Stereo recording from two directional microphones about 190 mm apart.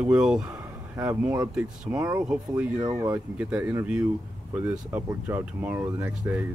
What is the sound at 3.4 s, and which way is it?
Speech, 10° right (ahead or behind).